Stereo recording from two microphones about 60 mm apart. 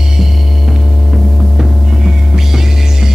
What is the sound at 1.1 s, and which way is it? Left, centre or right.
Hum, centre.